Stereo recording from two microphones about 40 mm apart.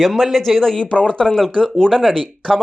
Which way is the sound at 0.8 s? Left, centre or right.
Left.